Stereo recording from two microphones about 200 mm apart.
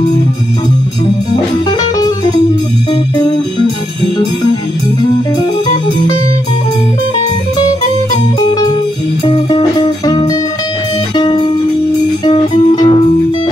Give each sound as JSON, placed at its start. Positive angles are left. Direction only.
{"t": 9.2, "sound": "music", "side_deg": 20}